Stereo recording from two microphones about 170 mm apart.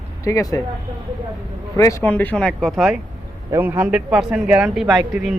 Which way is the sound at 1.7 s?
15° left (ahead or behind).